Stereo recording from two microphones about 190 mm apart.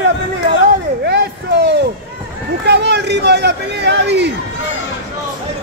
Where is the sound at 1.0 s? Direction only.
60° right (ahead or behind).